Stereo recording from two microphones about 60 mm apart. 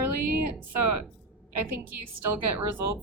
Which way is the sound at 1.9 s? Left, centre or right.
Right.